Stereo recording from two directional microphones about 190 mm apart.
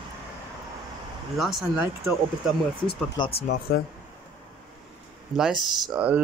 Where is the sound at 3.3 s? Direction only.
55° left (ahead or behind).